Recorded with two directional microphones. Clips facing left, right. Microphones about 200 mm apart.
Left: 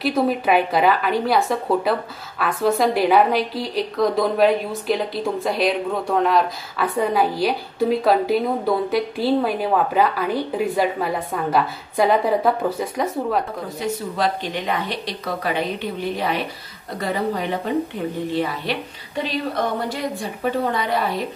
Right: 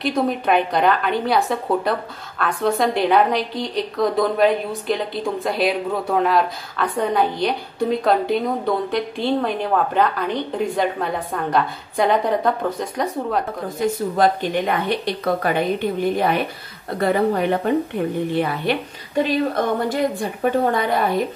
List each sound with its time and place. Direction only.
0.0 s a woman's voice: 5° left (ahead or behind)
13.7 s a woman's voice: 50° right (ahead or behind)